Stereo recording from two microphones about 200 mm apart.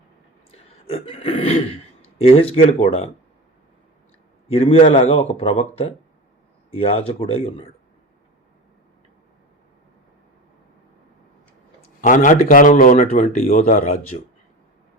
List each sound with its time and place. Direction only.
0.5 s a man's voice: 30° left (ahead or behind)
4.4 s a man's voice: 30° left (ahead or behind)
11.9 s a man's voice: 40° left (ahead or behind)